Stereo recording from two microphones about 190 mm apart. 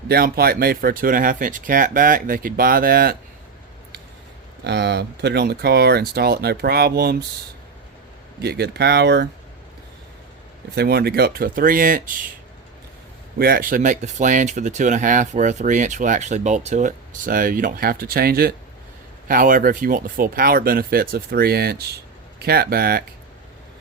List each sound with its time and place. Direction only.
0.1 s speech: 55° right (ahead or behind)
4.6 s speech: 60° right (ahead or behind)
8.4 s speech: 60° right (ahead or behind)
10.8 s speech: 55° right (ahead or behind)
13.4 s speech: 50° right (ahead or behind)